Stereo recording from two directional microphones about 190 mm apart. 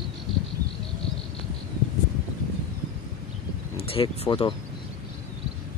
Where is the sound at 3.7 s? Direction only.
30° left (ahead or behind).